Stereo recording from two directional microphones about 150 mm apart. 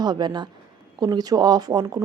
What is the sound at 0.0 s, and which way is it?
Speech, 30° right (ahead or behind).